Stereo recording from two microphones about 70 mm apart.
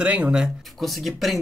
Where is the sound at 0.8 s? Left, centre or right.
Centre.